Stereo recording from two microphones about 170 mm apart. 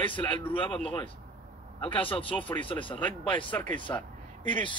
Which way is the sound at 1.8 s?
30° left (ahead or behind).